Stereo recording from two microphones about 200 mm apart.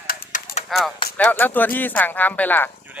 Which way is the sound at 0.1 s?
45° left (ahead or behind).